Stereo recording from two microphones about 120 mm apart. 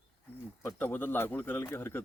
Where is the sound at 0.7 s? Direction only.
15° left (ahead or behind).